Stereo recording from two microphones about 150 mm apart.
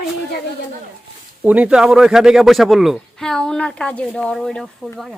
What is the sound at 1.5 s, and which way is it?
Speech, 5° right (ahead or behind).